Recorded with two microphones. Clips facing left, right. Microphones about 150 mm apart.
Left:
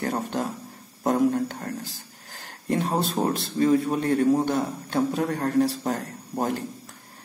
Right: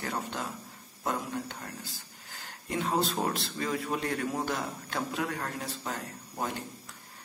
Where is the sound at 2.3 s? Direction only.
50° left (ahead or behind).